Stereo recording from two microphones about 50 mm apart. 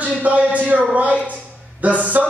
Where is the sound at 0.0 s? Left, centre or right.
Right.